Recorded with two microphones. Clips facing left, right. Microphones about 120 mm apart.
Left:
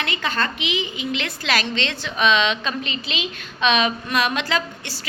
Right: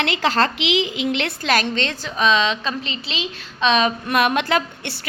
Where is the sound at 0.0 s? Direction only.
85° right.